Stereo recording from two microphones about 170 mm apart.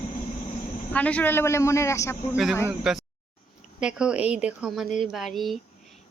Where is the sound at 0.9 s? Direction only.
10° left (ahead or behind).